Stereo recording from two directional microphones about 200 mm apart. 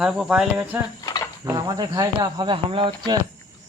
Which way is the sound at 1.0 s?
20° left (ahead or behind).